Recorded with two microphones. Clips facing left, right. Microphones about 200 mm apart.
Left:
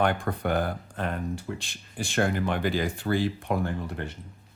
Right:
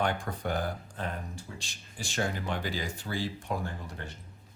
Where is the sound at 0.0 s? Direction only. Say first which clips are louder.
Left 5 dB; 60° left (ahead or behind).